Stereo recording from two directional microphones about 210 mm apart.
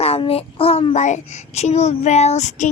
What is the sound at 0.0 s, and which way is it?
A child's voice, 30° left (ahead or behind).